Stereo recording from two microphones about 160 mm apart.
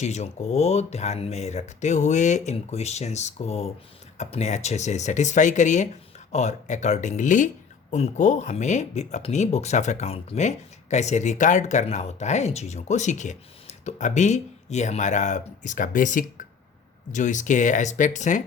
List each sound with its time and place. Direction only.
0.0 s speech: 45° left (ahead or behind)